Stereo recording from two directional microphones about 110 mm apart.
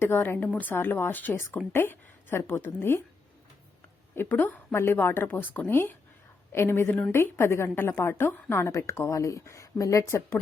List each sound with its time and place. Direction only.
0.0 s a woman's voice: 20° left (ahead or behind)
4.1 s a woman's voice: 20° left (ahead or behind)